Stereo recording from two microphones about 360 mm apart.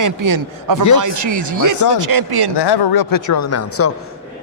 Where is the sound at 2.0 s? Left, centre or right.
Right.